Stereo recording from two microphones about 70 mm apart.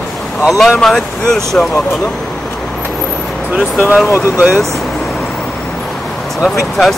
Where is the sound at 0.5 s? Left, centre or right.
Centre.